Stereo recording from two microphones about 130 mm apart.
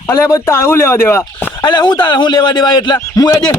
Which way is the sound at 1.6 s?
35° left (ahead or behind).